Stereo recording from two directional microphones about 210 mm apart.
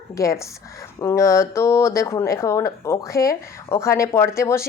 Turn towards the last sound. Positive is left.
turn(degrees=15)  # may be behind; listen again after turning